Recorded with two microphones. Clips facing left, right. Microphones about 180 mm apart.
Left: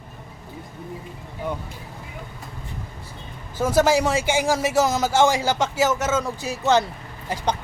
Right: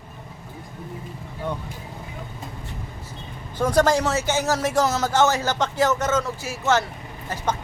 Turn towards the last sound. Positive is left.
turn(degrees=15)  # may be behind; listen again after turning